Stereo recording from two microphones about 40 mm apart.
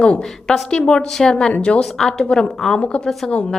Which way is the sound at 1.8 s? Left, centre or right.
Centre.